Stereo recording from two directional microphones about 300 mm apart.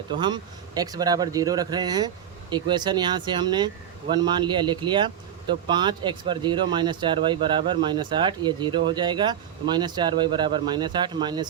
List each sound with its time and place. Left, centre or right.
0.1 s speech: centre